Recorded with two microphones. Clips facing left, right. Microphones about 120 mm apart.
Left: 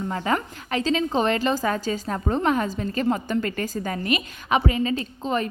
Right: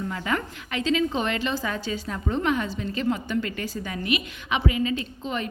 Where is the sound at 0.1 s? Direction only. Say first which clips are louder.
Left 3 dB; 35° left (ahead or behind).